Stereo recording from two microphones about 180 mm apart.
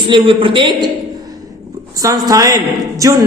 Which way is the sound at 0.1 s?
30° right (ahead or behind).